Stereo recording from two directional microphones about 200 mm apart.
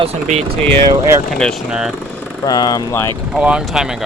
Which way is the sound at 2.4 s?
20° left (ahead or behind).